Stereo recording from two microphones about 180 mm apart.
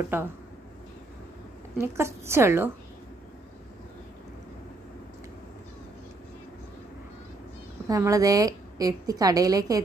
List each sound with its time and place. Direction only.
0.1 s a woman's voice: 10° right (ahead or behind)
1.8 s a woman's voice: 15° right (ahead or behind)
7.9 s a woman's voice: 20° right (ahead or behind)